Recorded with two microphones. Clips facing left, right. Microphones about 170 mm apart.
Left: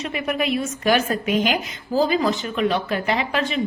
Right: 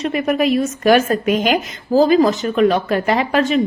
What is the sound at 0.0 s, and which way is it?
A woman's voice, 45° right (ahead or behind).